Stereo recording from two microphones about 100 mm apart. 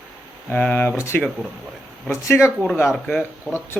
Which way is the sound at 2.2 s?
30° left (ahead or behind).